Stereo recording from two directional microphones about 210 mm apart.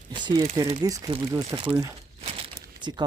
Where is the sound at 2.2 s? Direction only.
30° right (ahead or behind).